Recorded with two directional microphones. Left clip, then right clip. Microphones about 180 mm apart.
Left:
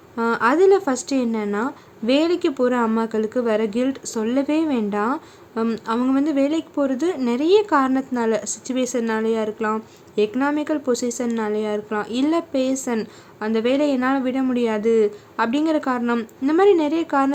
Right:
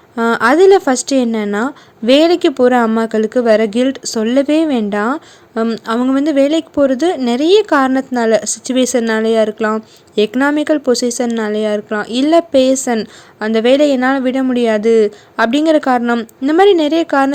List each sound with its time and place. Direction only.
0.2 s speech: 35° right (ahead or behind)